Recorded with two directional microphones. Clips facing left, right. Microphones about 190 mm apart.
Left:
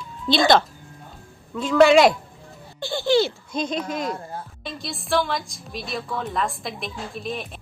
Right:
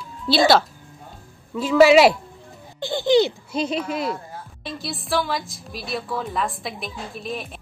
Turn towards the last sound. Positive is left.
turn(degrees=0)  # may be behind; listen again after turning